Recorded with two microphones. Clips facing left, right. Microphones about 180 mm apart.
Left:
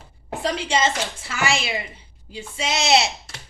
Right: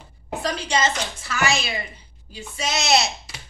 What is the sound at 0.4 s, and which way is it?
A woman's voice, 25° left (ahead or behind).